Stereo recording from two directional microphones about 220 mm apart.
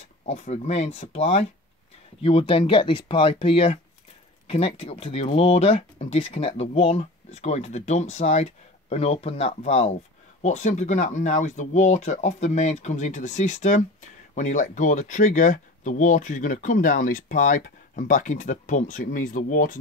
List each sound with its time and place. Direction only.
0.2 s speech: 30° left (ahead or behind)